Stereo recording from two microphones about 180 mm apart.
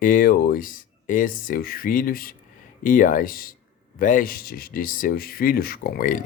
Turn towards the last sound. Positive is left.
turn(degrees=50)  # may be behind; listen again after turning